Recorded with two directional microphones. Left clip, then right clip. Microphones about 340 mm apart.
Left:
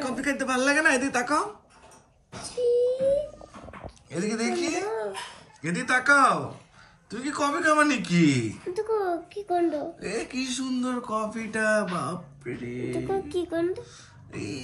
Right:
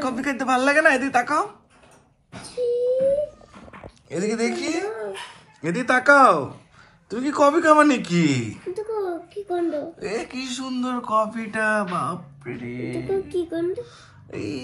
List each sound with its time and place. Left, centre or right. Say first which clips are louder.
0.0 s a woman's voice: right 3 dB; centre
4.1 s a man's voice: right 4 dB; centre
5.6 s speech: right 4 dB; centre
8.7 s a child's voice: even; centre
9.5 s speech: even; centre
13.0 s a man's voice: right 5 dB; centre